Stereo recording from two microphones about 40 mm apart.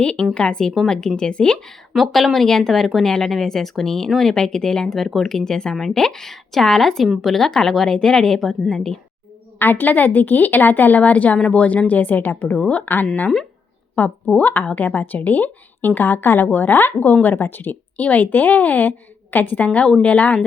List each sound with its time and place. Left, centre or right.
0.3 s speech: left
2.0 s speech: centre
7.9 s speech: centre
8.7 s speech: centre
9.6 s a woman's voice: left
12.5 s speech: left
12.8 s speech: left
13.9 s a woman's voice: left
16.0 s a woman's voice: left
16.5 s speech: left
17.9 s a woman's voice: left
19.5 s speech: left